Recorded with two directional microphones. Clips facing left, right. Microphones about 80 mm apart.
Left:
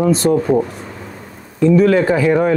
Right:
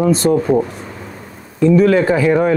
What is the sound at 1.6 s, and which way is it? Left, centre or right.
Speech, right.